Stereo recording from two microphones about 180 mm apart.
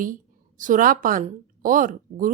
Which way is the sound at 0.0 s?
50° right (ahead or behind).